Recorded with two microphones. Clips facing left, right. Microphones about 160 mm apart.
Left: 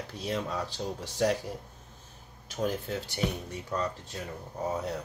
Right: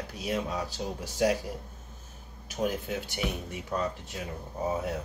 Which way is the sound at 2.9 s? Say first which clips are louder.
Even; 15° right (ahead or behind).